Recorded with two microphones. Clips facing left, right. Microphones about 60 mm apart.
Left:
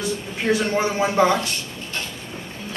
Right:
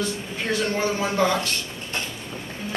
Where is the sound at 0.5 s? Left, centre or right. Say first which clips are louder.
Left 3 dB; centre.